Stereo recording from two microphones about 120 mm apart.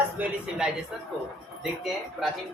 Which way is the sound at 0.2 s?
15° right (ahead or behind).